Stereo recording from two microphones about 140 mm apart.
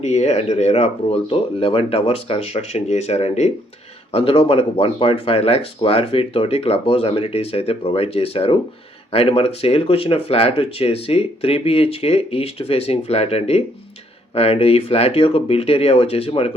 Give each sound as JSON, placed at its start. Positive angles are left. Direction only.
{"t": 0.0, "sound": "speech", "side_deg": 50}